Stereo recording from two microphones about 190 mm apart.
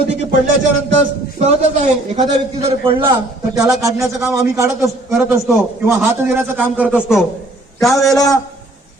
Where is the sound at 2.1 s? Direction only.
35° right (ahead or behind).